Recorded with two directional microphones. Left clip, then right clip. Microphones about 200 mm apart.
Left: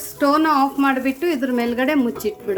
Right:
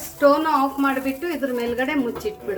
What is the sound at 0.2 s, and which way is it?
Speech, 45° left (ahead or behind).